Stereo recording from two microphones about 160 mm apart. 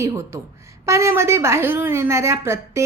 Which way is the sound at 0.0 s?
15° right (ahead or behind).